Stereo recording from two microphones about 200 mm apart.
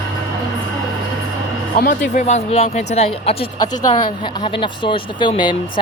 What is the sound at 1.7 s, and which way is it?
Speech, 40° left (ahead or behind).